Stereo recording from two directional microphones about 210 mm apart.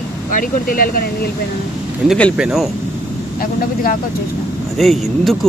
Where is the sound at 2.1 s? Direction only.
Centre (ahead or behind).